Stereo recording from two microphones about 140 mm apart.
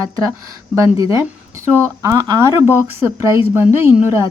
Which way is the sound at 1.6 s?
20° right (ahead or behind).